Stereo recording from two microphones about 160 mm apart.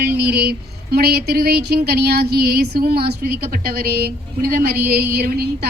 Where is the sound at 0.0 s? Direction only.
75° right (ahead or behind).